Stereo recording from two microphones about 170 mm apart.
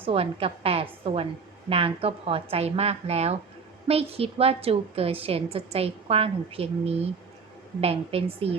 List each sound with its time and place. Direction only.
0.0 s a woman's voice: 35° right (ahead or behind)